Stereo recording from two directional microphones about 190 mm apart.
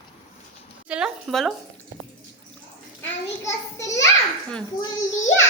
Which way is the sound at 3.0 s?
15° left (ahead or behind).